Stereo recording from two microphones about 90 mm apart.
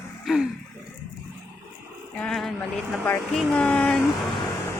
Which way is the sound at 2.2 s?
5° left (ahead or behind).